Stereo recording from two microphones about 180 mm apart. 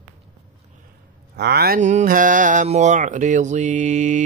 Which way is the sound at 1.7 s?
40° right (ahead or behind).